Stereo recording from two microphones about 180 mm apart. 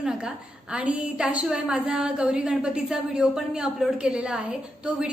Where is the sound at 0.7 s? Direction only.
5° right (ahead or behind).